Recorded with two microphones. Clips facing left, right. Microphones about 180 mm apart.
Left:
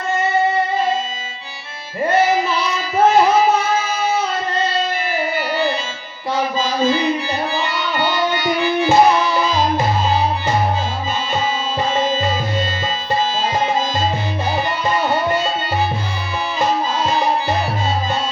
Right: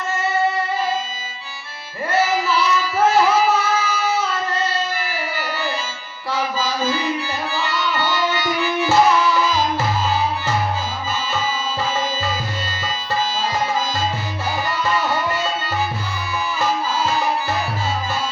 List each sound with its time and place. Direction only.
2.0 s singing: 20° left (ahead or behind)
4.9 s music: 20° left (ahead or behind)
11.9 s tabla: 20° left (ahead or behind)
14.8 s music: 20° left (ahead or behind)
17.0 s music: 20° left (ahead or behind)